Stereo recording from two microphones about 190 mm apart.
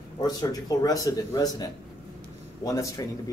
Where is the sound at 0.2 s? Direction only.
20° left (ahead or behind).